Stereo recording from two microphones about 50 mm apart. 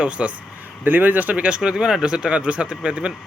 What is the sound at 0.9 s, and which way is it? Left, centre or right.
Speech, right.